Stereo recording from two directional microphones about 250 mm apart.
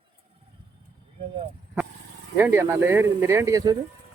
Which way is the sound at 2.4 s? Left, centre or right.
Centre.